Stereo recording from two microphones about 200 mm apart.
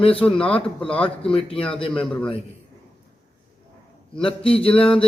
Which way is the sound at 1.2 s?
25° left (ahead or behind).